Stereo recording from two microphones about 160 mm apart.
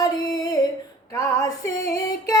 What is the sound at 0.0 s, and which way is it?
Music, 25° left (ahead or behind).